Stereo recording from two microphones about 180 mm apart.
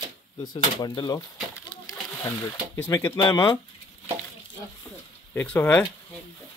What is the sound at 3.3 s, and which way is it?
Speech, 25° left (ahead or behind).